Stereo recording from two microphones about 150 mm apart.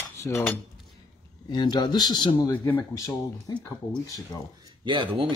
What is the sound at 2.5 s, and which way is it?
Speech, 15° left (ahead or behind).